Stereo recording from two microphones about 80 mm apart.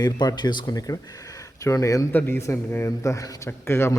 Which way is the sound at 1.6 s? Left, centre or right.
Left.